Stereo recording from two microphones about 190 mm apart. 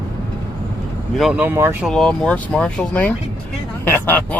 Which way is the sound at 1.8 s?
5° left (ahead or behind).